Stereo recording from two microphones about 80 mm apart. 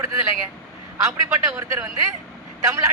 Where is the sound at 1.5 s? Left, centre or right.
Right.